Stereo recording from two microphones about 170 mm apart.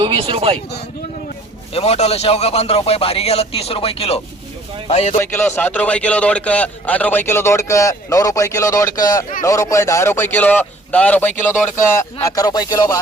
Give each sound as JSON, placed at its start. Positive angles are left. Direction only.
{"t": 0.0, "sound": "speech", "side_deg": -30}
{"t": 1.7, "sound": "speech", "side_deg": 35}
{"t": 5.2, "sound": "a man's voice", "side_deg": 15}
{"t": 12.2, "sound": "speech", "side_deg": 20}